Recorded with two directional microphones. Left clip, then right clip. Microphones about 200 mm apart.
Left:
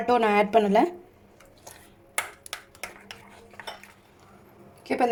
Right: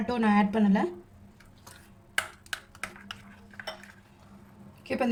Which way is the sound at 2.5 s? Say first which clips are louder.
Right 1 dB; 5° right (ahead or behind).